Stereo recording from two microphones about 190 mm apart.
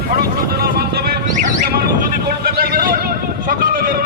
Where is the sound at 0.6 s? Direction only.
55° right (ahead or behind).